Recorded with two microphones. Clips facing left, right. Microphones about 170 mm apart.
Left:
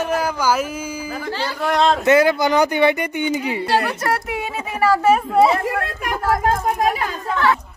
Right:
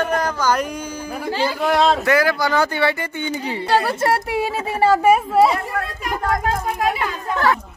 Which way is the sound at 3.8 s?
30° right (ahead or behind).